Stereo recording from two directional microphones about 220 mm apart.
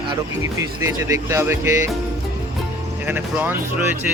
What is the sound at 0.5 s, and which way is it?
Speech, 15° right (ahead or behind).